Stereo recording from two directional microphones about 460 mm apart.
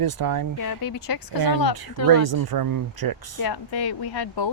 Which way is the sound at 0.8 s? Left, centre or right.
Left.